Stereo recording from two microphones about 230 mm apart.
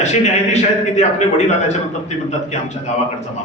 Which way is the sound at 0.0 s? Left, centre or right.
Left.